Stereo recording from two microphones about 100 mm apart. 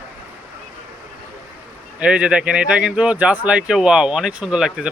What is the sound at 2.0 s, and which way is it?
Speech, 10° right (ahead or behind).